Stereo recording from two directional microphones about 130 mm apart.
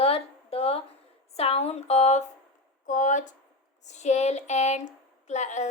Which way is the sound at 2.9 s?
75° left (ahead or behind).